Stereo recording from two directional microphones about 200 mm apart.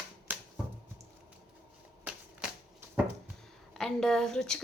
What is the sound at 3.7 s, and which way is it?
Speech, centre (ahead or behind).